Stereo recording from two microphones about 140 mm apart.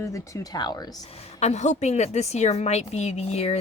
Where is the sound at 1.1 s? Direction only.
50° left (ahead or behind).